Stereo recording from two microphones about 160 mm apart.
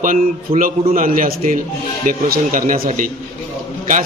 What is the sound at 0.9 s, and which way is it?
A man's voice, 60° right (ahead or behind).